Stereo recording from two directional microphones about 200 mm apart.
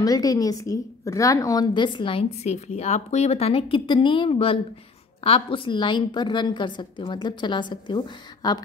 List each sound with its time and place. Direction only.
0.0 s a woman's voice: 20° left (ahead or behind)